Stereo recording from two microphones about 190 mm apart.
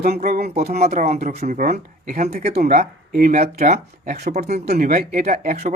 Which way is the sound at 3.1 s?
50° right (ahead or behind).